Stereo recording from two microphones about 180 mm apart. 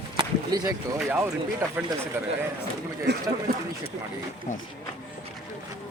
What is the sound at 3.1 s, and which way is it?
Speech, 70° right (ahead or behind).